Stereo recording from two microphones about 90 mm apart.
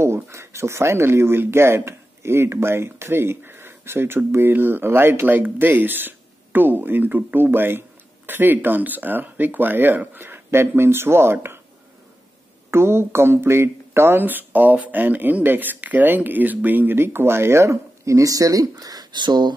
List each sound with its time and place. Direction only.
0.0 s speech: 30° right (ahead or behind)
12.7 s speech: 30° right (ahead or behind); by 19.5 s 55° right (ahead or behind)